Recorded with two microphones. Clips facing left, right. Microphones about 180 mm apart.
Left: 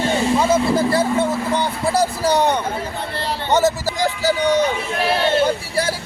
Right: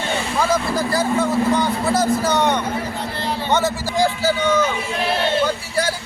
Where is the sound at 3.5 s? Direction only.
40° left (ahead or behind).